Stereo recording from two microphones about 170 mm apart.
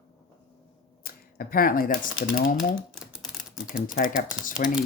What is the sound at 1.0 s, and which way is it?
Speech, 60° left (ahead or behind).